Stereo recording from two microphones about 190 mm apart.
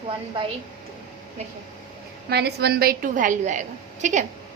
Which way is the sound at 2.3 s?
60° right (ahead or behind).